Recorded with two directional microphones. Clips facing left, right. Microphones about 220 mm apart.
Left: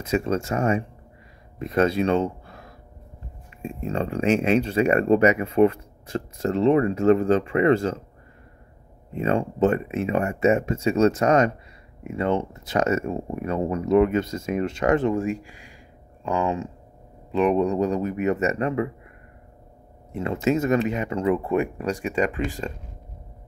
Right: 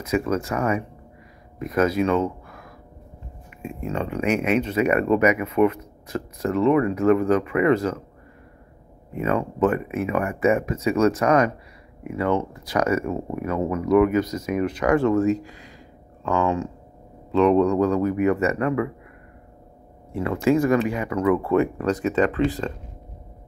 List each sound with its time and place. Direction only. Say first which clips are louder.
0.0 s speech: right 1 dB; 25° left (ahead or behind)
9.1 s speech: even; 30° left (ahead or behind)
20.1 s speech: right 3 dB; 25° left (ahead or behind)